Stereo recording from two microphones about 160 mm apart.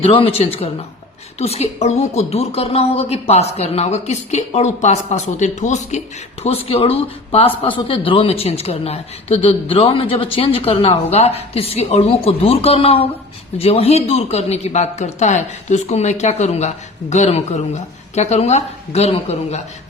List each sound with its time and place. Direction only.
0.0 s speech: 35° left (ahead or behind)